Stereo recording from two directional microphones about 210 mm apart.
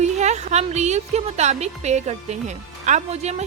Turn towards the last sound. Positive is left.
turn(degrees=-35)  # may be behind; listen again after turning